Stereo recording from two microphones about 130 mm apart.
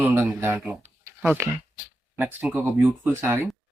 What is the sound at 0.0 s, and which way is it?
Speech, 15° right (ahead or behind).